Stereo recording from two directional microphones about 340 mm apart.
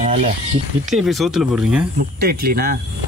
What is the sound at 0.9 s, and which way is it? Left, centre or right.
Speech, centre.